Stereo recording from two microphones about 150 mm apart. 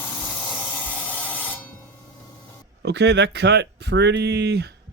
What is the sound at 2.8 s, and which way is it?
Speech, 90° right.